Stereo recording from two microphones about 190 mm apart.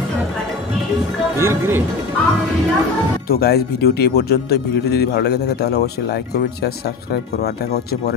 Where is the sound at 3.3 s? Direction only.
55° left (ahead or behind).